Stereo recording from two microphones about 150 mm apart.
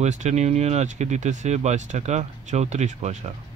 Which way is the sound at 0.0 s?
50° right (ahead or behind).